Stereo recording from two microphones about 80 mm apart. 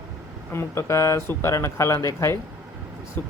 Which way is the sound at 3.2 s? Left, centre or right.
Left.